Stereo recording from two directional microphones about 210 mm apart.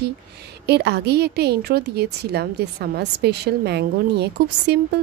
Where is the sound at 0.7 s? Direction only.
50° right (ahead or behind).